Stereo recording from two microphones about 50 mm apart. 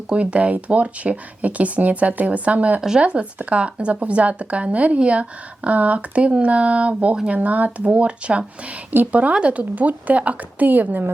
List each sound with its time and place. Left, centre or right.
0.1 s speech: right